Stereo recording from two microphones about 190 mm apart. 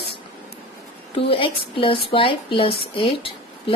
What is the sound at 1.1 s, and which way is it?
A woman's voice, 25° left (ahead or behind).